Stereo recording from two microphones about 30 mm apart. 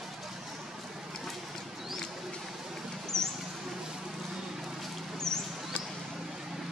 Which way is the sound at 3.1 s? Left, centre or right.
Centre.